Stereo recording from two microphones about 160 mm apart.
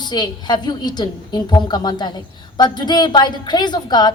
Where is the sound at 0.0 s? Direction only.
25° left (ahead or behind).